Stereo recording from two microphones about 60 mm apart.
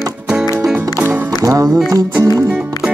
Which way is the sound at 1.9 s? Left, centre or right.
Right.